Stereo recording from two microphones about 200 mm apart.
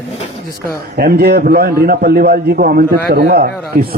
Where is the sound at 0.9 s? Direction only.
50° right (ahead or behind).